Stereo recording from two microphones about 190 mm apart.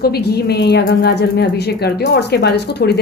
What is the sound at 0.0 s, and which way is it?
A woman's voice, 55° left (ahead or behind).